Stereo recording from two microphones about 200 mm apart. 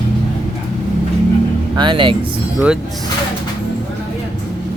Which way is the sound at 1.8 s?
25° right (ahead or behind).